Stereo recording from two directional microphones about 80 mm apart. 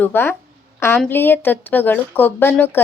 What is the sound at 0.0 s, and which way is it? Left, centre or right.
A woman's voice, left.